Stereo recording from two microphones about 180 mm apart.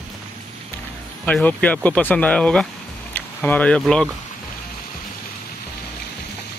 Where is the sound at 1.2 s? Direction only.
10° left (ahead or behind).